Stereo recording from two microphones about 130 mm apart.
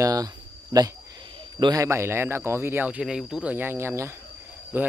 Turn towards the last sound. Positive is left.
turn(degrees=-15)  # may be behind; listen again after turning